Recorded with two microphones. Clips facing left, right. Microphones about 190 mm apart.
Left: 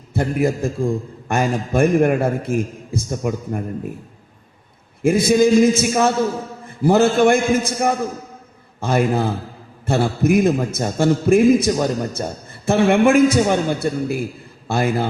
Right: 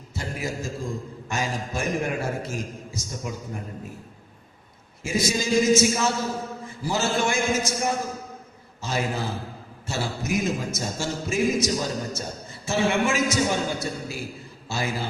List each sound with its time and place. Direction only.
0.1 s a man's voice: 55° left (ahead or behind)
5.0 s a man's voice: 55° left (ahead or behind)